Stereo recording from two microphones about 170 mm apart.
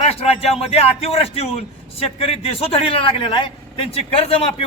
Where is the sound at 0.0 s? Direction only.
35° left (ahead or behind).